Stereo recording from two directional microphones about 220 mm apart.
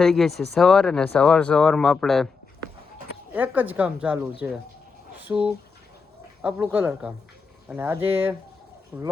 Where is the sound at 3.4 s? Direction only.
10° right (ahead or behind).